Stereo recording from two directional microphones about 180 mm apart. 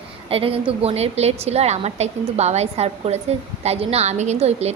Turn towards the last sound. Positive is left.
turn(degrees=-35)  # may be behind; listen again after turning